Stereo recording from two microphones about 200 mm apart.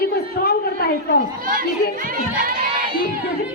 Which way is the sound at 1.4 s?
45° right (ahead or behind).